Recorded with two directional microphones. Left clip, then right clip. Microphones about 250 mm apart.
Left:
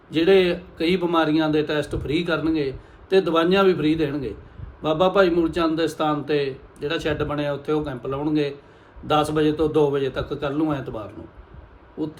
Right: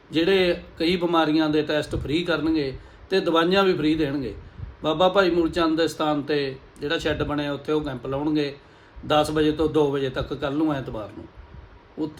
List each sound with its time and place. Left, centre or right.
0.1 s a man's voice: centre